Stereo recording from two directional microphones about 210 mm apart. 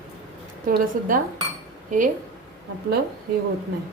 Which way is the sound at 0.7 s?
40° right (ahead or behind).